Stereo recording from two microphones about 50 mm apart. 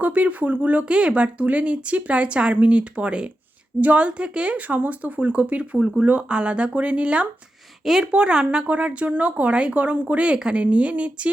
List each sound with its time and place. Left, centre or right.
0.0 s speech: right
7.9 s a woman's voice: centre
8.1 s speech: centre